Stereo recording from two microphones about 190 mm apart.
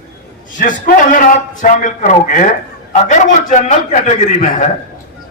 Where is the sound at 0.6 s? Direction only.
45° left (ahead or behind).